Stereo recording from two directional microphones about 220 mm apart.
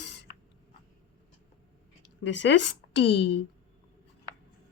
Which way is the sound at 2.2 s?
55° left (ahead or behind).